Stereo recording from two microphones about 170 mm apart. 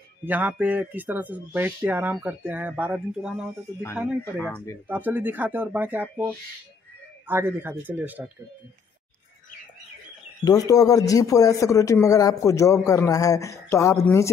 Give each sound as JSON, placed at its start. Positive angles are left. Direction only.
{"t": 0.2, "sound": "speech", "side_deg": -10}
{"t": 4.4, "sound": "speech", "side_deg": 10}
{"t": 4.8, "sound": "speech", "side_deg": -10}
{"t": 10.4, "sound": "speech", "side_deg": 20}